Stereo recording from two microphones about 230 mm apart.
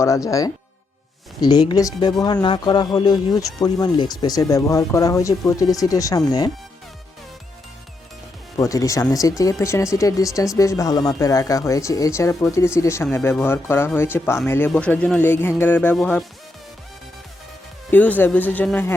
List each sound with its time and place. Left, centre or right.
0.0 s speech: centre
8.5 s speech: centre
17.9 s speech: centre